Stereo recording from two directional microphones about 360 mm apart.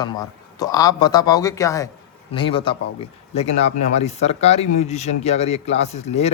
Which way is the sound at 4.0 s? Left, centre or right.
Centre.